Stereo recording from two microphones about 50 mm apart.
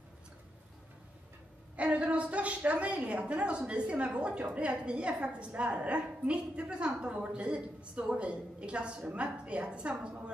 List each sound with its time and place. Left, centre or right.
1.8 s a woman's voice: right